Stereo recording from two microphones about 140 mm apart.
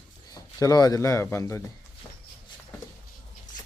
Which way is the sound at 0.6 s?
25° left (ahead or behind).